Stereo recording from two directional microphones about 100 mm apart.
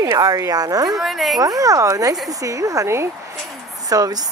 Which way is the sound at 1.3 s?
40° right (ahead or behind).